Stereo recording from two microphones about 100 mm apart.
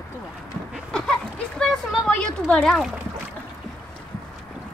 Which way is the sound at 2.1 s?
10° left (ahead or behind).